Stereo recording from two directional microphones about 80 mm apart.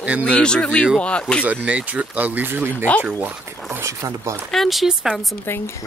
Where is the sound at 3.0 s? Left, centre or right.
Right.